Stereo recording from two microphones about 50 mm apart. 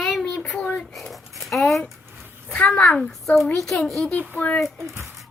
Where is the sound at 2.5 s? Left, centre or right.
Left.